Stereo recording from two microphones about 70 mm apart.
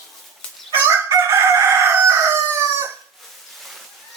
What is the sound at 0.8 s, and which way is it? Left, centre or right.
Chicken, right.